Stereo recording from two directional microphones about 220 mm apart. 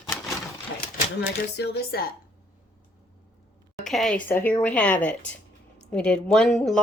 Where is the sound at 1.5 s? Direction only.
50° left (ahead or behind).